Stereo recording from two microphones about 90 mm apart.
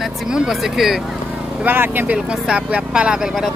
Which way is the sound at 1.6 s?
25° right (ahead or behind).